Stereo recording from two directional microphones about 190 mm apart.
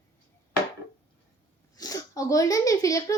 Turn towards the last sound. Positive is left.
turn(degrees=20)  # may be behind; listen again after turning